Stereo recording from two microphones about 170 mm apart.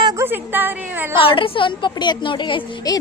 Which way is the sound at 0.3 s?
10° right (ahead or behind).